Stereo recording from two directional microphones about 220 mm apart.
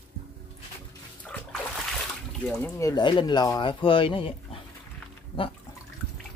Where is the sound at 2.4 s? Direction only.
5° left (ahead or behind); by 4.6 s 25° left (ahead or behind).